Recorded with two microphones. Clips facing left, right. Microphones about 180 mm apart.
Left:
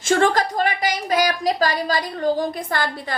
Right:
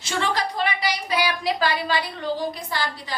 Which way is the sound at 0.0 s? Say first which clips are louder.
Left 7 dB; 50° left (ahead or behind).